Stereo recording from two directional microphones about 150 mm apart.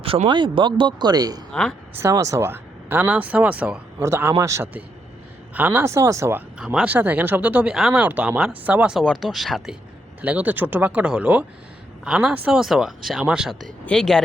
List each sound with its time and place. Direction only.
0.0 s speech: 40° right (ahead or behind); by 6.4 s 20° right (ahead or behind)
6.6 s speech: 10° right (ahead or behind)